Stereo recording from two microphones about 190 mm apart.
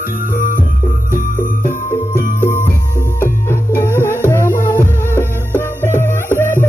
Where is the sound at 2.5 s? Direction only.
45° left (ahead or behind).